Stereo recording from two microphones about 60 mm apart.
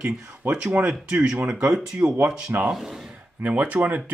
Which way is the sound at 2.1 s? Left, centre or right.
Right.